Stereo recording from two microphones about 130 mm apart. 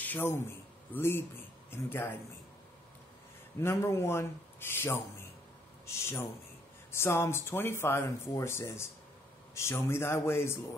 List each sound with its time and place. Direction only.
0.0 s speech: 15° left (ahead or behind)
3.5 s speech: 20° left (ahead or behind)
6.9 s speech: 20° left (ahead or behind)